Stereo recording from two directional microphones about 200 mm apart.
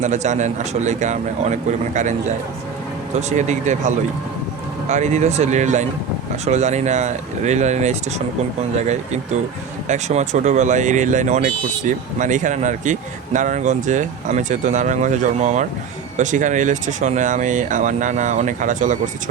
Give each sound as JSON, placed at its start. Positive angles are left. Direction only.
{"t": 0.0, "sound": "speech", "side_deg": -35}
{"t": 9.9, "sound": "speech", "side_deg": -35}